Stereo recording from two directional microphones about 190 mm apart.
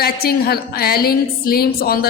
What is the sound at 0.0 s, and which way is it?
A woman's voice, 55° left (ahead or behind).